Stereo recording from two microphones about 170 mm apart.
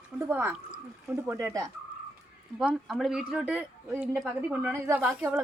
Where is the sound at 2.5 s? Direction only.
5° right (ahead or behind).